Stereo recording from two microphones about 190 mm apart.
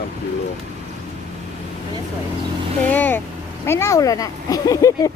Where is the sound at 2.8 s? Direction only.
10° left (ahead or behind).